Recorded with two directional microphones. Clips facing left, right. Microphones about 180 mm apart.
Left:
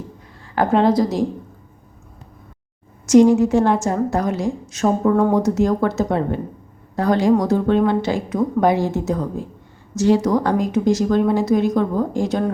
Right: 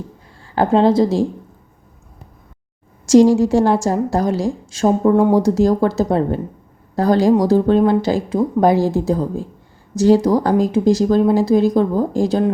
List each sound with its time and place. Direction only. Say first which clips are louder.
0.5 s a woman's voice: right 2 dB; 30° right (ahead or behind)
3.1 s speech: right 1 dB; 30° right (ahead or behind)